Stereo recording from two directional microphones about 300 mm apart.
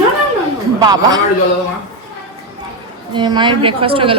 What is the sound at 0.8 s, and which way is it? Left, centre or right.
Speech, centre.